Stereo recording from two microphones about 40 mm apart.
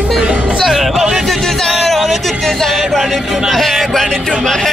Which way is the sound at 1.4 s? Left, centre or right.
Centre.